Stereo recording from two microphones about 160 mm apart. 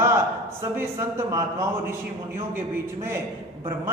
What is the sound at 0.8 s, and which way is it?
A man's voice, 15° right (ahead or behind).